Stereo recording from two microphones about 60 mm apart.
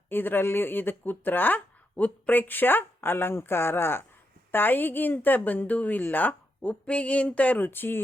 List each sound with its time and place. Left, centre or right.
0.1 s speech: left
7.7 s speech: left